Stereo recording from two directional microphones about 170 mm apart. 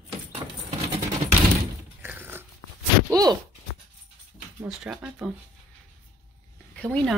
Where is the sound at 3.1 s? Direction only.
20° right (ahead or behind).